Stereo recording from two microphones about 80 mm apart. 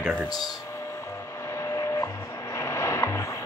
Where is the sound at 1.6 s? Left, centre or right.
Left.